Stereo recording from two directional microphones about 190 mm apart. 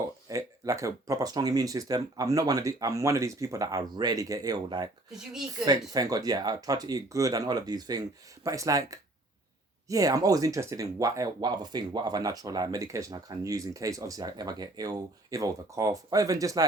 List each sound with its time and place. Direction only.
0.3 s speech: 15° right (ahead or behind)
5.1 s speech: centre (ahead or behind)
5.9 s speech: 20° right (ahead or behind)
9.9 s speech: 20° right (ahead or behind)